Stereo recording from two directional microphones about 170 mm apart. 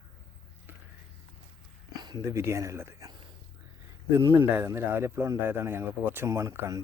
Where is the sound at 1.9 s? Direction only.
25° right (ahead or behind).